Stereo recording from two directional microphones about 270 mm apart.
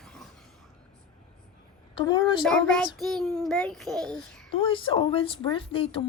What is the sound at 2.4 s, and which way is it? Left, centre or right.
Child singing, centre.